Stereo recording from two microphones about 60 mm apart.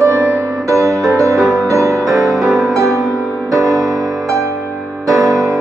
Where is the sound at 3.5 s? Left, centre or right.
Right.